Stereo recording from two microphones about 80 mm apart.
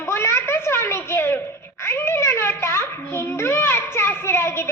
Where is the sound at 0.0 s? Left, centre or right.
Left.